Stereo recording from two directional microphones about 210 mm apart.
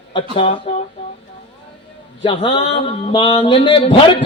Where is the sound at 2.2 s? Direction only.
25° left (ahead or behind).